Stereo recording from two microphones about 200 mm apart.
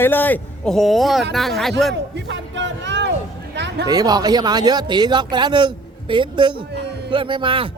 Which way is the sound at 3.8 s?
20° right (ahead or behind).